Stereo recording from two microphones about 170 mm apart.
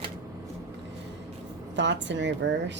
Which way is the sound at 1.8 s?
90° right.